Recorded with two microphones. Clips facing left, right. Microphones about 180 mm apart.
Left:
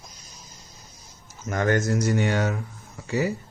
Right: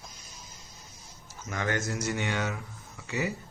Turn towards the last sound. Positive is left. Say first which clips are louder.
# left 7 dB
turn(degrees=40)  # may be behind; listen again after turning